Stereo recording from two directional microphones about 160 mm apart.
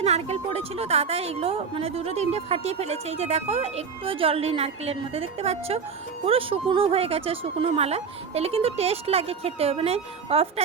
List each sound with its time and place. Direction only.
0.0 s a woman's voice: 40° right (ahead or behind)